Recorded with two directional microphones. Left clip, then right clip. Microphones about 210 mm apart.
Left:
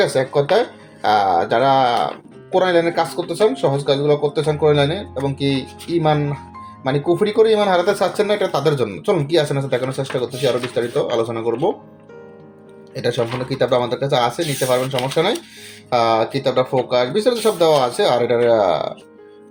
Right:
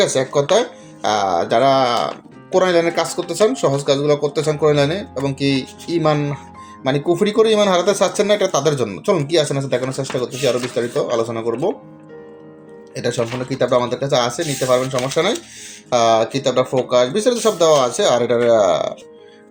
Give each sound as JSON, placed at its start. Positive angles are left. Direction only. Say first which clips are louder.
{"t": 0.0, "sound": "speech", "louder": "even", "side_deg": -5}
{"t": 12.9, "sound": "speech", "louder": "left 1 dB", "side_deg": 0}